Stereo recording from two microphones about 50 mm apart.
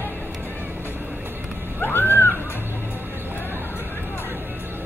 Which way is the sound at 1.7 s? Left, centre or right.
Left.